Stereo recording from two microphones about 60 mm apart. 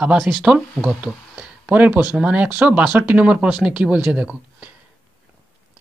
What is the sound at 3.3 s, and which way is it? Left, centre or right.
Speech, centre.